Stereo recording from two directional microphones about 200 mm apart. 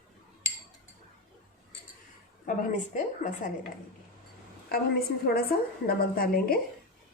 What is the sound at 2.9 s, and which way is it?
Speech, 40° left (ahead or behind).